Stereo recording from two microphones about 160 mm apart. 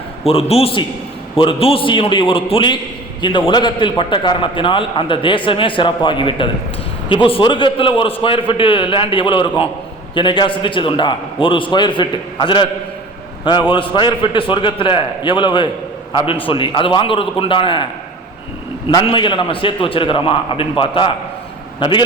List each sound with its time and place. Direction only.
0.3 s a man's voice: 40° left (ahead or behind)
19.0 s a man's voice: 30° left (ahead or behind)